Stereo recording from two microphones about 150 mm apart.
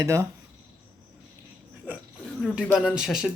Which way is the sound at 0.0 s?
20° right (ahead or behind).